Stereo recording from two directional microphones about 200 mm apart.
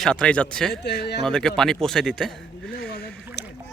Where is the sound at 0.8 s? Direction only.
55° left (ahead or behind).